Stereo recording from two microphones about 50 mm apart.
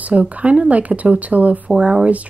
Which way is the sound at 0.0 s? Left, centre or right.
Right.